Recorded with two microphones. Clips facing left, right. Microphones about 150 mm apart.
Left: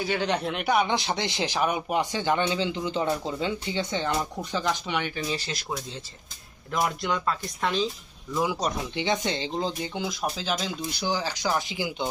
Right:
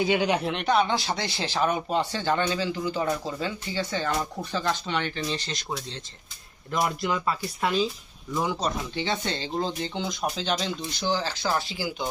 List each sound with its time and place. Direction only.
0.0 s speech: 15° right (ahead or behind)
0.5 s speech: 10° left (ahead or behind)
8.3 s speech: 5° left (ahead or behind)